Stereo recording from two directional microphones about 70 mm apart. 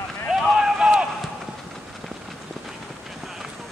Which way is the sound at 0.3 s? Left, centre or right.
Centre.